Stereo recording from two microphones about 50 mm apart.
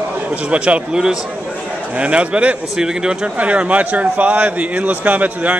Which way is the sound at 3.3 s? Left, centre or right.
Right.